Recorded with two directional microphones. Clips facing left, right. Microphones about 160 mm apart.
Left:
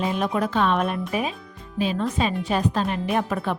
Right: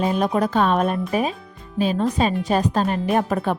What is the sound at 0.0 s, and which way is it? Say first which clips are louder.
A woman's voice: right 4 dB; 40° right (ahead or behind).